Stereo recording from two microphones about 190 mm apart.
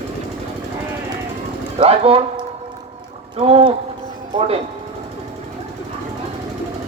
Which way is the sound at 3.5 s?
30° right (ahead or behind).